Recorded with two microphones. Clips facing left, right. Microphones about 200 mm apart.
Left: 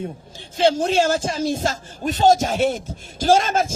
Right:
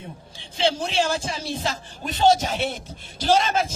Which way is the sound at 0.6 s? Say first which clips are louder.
Left 6 dB; 45° left (ahead or behind).